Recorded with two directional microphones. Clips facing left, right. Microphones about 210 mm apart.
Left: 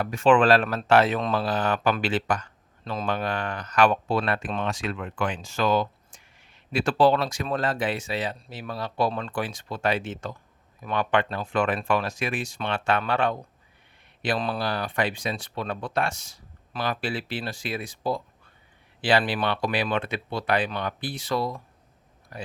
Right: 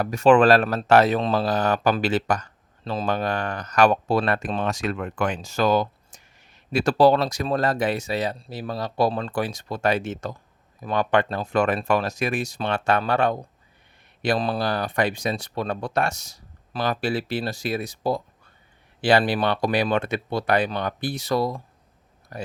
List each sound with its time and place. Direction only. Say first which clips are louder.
0.0 s speech: right 3 dB; 40° right (ahead or behind)